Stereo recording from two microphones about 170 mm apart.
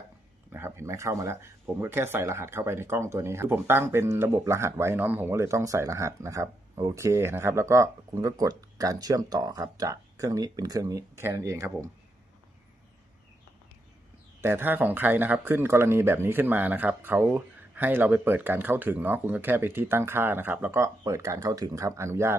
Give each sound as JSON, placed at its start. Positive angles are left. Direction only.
{"t": 0.5, "sound": "speech", "side_deg": -15}
{"t": 14.4, "sound": "speech", "side_deg": -10}